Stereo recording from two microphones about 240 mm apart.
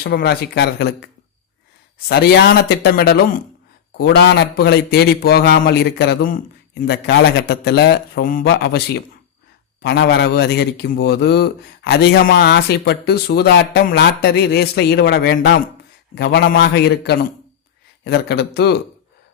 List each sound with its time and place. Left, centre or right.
0.0 s a man's voice: left
2.0 s a man's voice: left